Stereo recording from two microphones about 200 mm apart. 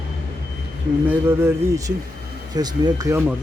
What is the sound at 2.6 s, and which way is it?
Speech, 15° right (ahead or behind).